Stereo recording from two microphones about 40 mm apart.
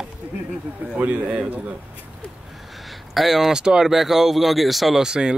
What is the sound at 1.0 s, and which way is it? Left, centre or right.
Speech, right.